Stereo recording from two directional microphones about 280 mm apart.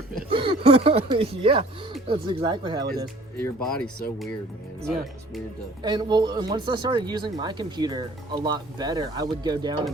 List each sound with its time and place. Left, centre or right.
0.3 s speech: centre
3.3 s speech: centre
5.8 s speech: centre